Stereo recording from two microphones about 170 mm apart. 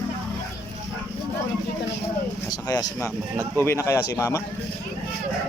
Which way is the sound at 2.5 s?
20° left (ahead or behind).